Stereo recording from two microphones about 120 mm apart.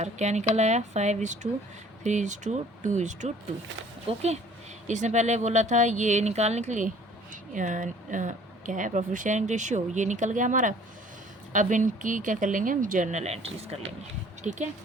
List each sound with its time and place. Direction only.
0.0 s speech: 70° right (ahead or behind)
4.1 s speech: 55° right (ahead or behind)
4.9 s speech: 85° right; by 13.7 s 60° right (ahead or behind)
14.5 s speech: 80° right